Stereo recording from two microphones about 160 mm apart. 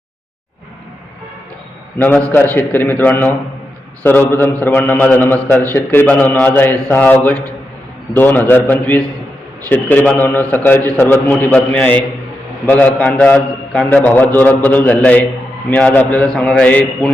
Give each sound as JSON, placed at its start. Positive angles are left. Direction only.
{"t": 2.0, "sound": "a man's voice", "side_deg": 10}